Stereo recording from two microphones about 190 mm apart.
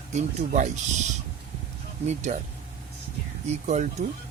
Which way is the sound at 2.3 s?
35° right (ahead or behind).